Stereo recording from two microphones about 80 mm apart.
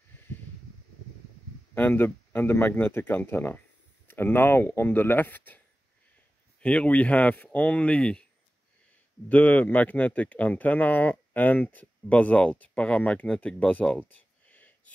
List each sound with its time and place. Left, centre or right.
1.8 s speech: left
6.6 s speech: centre
9.3 s speech: left